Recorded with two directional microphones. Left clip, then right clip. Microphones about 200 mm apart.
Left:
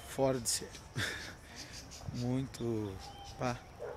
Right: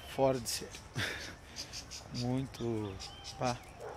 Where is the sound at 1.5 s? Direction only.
45° right (ahead or behind).